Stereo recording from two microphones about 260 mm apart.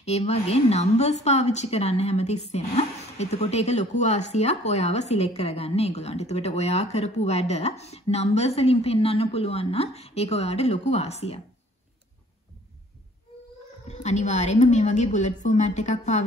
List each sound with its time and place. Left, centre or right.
0.0 s a woman's voice: left
13.8 s a woman's voice: left